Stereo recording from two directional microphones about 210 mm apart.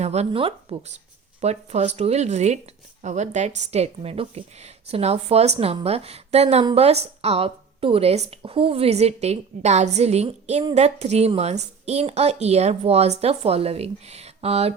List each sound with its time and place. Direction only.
0.0 s a woman's voice: 30° right (ahead or behind)